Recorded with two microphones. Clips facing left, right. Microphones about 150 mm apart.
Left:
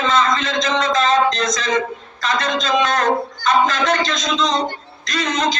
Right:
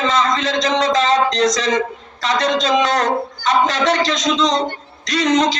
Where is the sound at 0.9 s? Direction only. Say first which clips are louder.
Right 1 dB; 80° right.